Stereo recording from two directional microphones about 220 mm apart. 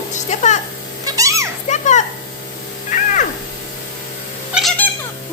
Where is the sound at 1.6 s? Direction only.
30° left (ahead or behind).